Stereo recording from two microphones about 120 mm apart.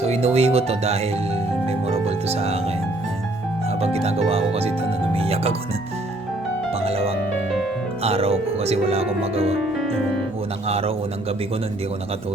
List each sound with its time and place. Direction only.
0.0 s speech: 60° right (ahead or behind)
1.9 s music: 60° right (ahead or behind)
3.8 s speech: 60° right (ahead or behind)
6.8 s music: 55° right (ahead or behind)
8.0 s speech: 55° right (ahead or behind)
10.7 s speech: 55° right (ahead or behind)